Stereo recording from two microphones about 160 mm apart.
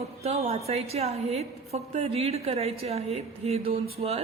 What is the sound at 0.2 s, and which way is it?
A woman's voice, 40° right (ahead or behind).